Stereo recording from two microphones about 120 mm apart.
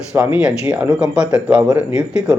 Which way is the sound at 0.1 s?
20° right (ahead or behind).